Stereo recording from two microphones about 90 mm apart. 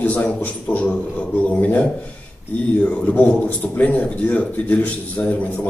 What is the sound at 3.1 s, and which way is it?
Speech, 20° left (ahead or behind).